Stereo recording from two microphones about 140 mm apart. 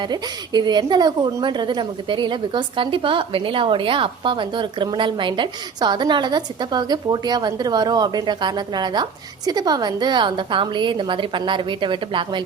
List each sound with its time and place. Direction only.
0.0 s a woman's voice: 30° right (ahead or behind)